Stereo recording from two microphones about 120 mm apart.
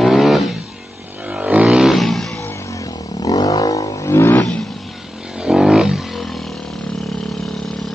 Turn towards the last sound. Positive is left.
turn(degrees=5)  # may be behind; listen again after turning